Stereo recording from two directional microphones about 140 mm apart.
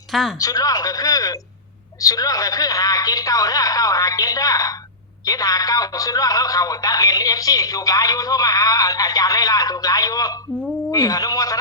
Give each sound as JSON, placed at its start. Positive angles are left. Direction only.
{"t": 0.1, "sound": "speech", "side_deg": 0}
{"t": 0.3, "sound": "speech", "side_deg": 25}